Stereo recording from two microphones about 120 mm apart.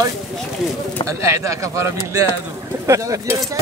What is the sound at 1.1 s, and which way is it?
Speech, 25° right (ahead or behind).